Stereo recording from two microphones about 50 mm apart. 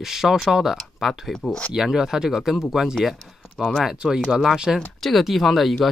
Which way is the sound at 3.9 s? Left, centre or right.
Centre.